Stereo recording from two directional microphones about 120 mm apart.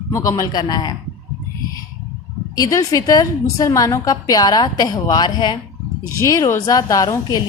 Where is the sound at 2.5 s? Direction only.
30° left (ahead or behind).